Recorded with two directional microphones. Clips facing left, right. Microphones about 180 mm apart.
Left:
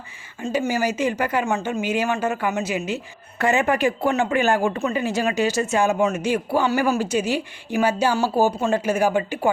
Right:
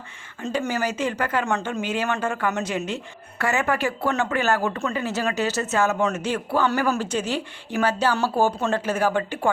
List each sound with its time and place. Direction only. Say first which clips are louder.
0.5 s speech: left 3 dB; 10° left (ahead or behind)
3.3 s speech: left 4 dB; 20° left (ahead or behind)